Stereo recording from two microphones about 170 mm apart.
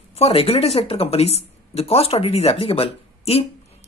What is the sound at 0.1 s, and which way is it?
Speech, 35° left (ahead or behind).